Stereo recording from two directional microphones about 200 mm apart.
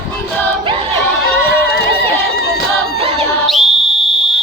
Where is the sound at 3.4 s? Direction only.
Centre (ahead or behind).